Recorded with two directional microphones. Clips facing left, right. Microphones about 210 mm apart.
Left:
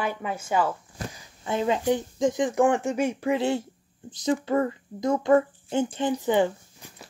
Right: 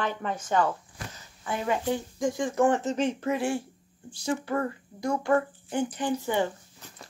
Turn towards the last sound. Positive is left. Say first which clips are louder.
# left 5 dB
turn(degrees=15)  # may be behind; listen again after turning